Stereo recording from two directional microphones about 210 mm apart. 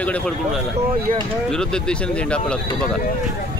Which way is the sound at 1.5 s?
5° left (ahead or behind).